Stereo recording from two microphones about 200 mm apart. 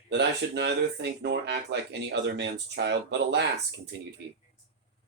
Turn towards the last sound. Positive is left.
turn(degrees=-55)  # may be behind; listen again after turning